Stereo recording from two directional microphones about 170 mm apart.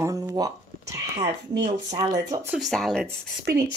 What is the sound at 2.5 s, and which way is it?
Speech, centre (ahead or behind).